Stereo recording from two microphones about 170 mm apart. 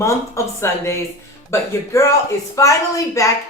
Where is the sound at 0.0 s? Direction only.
15° left (ahead or behind).